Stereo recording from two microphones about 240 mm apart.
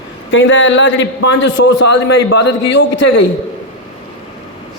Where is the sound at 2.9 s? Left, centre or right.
Left.